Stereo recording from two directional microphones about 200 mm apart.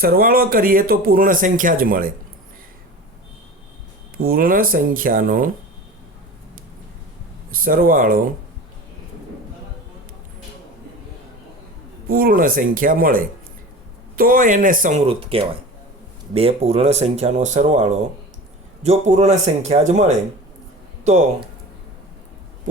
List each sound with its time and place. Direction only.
0.0 s speech: 45° right (ahead or behind)
4.2 s speech: 45° right (ahead or behind)
7.5 s speech: 45° right (ahead or behind)
12.0 s speech: 45° right (ahead or behind)